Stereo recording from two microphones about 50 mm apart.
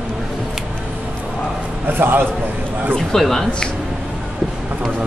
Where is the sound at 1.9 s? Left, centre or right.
Right.